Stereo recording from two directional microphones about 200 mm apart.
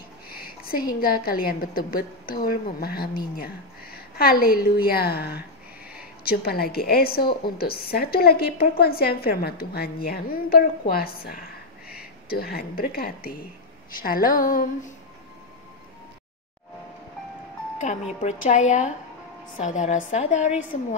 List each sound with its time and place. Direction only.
0.3 s a woman's voice: 45° left (ahead or behind)
18.2 s a woman's voice: 35° left (ahead or behind)